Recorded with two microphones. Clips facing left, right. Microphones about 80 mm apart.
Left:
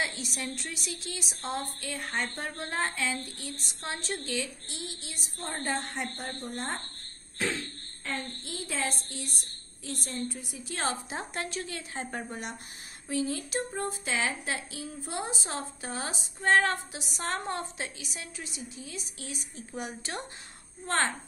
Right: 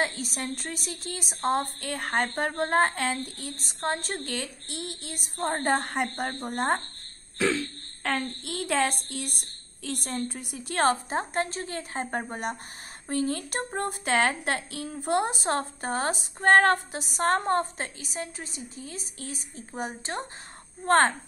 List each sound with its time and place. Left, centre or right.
0.0 s a woman's voice: right
8.0 s a woman's voice: right
20.8 s speech: right